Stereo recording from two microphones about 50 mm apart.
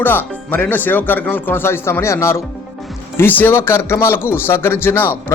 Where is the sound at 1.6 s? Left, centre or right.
Left.